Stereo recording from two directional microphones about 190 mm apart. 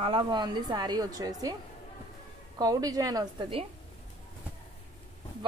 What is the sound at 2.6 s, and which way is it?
A woman's voice, 20° right (ahead or behind).